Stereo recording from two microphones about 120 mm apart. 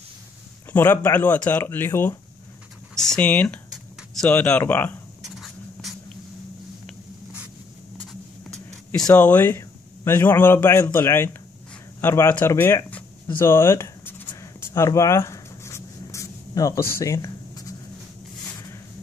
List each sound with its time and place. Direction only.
0.7 s speech: 15° left (ahead or behind)
2.9 s speech: 5° left (ahead or behind)
5.4 s a sound: centre (ahead or behind)
8.1 s writing: 5° left (ahead or behind)
9.1 s speech: 15° left (ahead or behind)
13.4 s writing: 20° left (ahead or behind)